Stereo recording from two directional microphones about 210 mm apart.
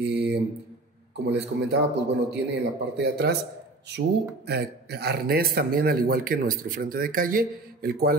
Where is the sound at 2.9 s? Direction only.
50° right (ahead or behind).